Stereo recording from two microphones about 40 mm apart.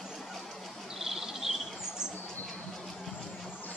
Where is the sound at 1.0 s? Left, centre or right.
Centre.